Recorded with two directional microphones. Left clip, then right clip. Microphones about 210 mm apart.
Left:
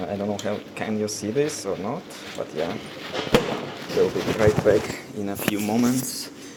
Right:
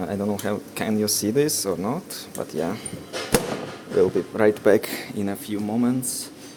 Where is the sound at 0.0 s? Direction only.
50° right (ahead or behind).